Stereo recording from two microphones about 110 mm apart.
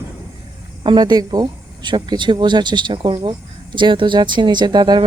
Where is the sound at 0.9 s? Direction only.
45° right (ahead or behind).